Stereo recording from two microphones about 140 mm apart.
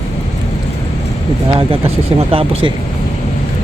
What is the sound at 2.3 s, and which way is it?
Speech, 40° right (ahead or behind).